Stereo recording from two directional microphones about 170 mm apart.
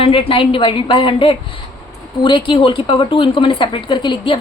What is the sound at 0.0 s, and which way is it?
Speech, 35° left (ahead or behind).